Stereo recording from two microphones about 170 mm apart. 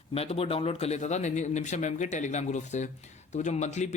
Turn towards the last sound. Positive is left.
turn(degrees=45)  # may be behind; listen again after turning